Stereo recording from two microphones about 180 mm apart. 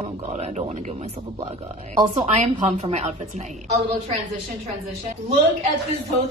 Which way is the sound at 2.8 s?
40° right (ahead or behind).